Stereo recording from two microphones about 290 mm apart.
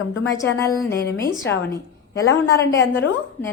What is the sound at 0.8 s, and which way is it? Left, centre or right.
A woman's voice, centre.